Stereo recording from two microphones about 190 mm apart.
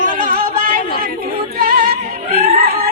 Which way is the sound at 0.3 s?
50° right (ahead or behind).